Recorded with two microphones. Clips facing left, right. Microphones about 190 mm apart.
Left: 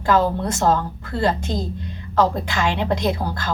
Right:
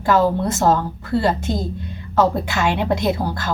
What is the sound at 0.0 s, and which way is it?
A woman's voice, 5° right (ahead or behind).